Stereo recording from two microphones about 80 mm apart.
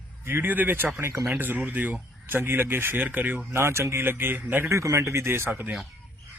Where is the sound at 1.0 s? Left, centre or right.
Right.